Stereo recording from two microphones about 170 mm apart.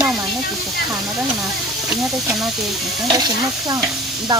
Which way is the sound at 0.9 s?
Centre (ahead or behind).